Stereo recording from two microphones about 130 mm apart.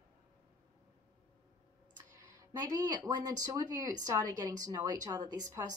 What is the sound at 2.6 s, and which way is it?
Speech, 30° right (ahead or behind).